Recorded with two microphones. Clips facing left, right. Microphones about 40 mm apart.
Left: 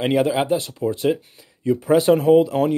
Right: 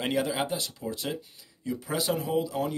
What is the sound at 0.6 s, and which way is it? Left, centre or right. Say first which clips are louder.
Speech: left 11 dB; left.